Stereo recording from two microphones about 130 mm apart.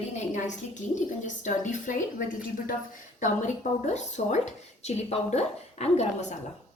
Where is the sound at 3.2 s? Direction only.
65° left (ahead or behind).